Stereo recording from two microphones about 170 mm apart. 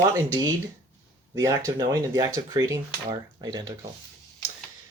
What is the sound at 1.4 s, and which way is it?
Speech, 20° right (ahead or behind).